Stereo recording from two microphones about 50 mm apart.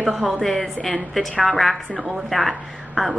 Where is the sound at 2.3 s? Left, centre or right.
Centre.